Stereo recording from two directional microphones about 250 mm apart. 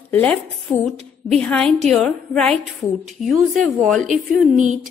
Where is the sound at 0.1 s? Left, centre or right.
Centre.